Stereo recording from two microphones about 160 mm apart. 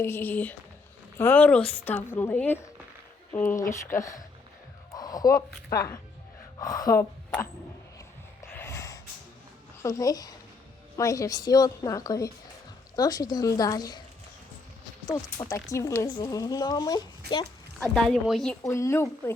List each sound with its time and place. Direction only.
0.0 s a woman's voice: 15° left (ahead or behind)
4.9 s music: 25° left (ahead or behind)
6.6 s a woman's voice: 20° left (ahead or behind)
8.4 s gasp: 15° left (ahead or behind)
9.8 s a woman's voice: 20° left (ahead or behind)
15.0 s a woman's voice: 20° left (ahead or behind)
17.7 s speech: 5° left (ahead or behind)
18.6 s a woman's voice: 20° left (ahead or behind)